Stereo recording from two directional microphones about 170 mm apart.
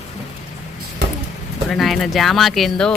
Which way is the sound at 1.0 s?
85° right.